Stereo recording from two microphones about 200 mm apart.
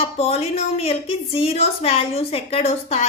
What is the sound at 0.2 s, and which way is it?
A woman's voice, 30° left (ahead or behind).